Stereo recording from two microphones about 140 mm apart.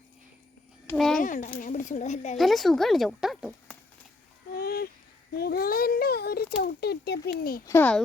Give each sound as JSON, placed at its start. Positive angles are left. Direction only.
{"t": 0.9, "sound": "speech", "side_deg": 5}
{"t": 1.2, "sound": "a child's voice", "side_deg": 70}
{"t": 2.4, "sound": "speech", "side_deg": 0}
{"t": 4.5, "sound": "a sound", "side_deg": 90}
{"t": 5.4, "sound": "a child's voice", "side_deg": 90}
{"t": 7.6, "sound": "a child's voice", "side_deg": 20}